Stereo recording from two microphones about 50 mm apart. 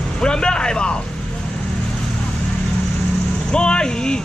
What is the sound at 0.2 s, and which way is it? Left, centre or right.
Vehicle, centre.